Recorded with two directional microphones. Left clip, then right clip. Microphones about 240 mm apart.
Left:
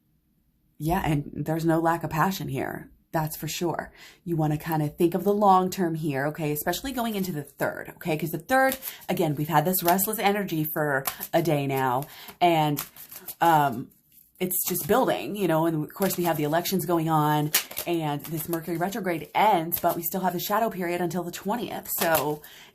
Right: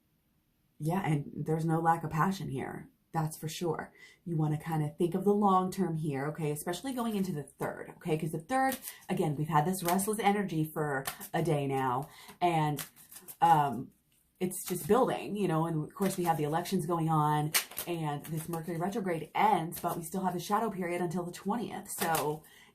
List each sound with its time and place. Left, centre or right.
0.8 s speech: left